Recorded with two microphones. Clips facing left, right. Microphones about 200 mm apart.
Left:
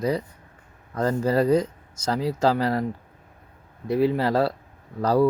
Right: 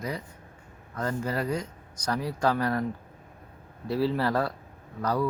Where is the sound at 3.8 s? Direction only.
20° left (ahead or behind).